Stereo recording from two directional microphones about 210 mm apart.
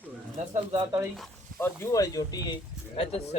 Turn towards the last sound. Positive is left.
turn(degrees=30)  # may be behind; listen again after turning